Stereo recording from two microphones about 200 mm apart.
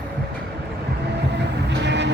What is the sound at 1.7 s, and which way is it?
Train, 60° right (ahead or behind).